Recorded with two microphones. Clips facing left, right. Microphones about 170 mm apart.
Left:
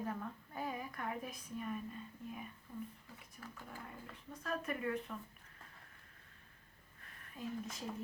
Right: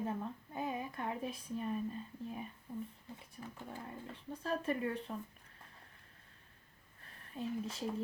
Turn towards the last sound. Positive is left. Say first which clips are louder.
# right 4 dB
turn(degrees=-30)  # may be behind; listen again after turning